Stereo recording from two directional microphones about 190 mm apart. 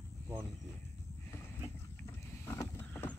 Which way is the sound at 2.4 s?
10° left (ahead or behind).